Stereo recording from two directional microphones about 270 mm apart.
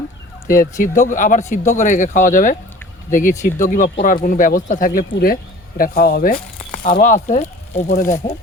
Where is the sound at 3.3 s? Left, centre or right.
Centre.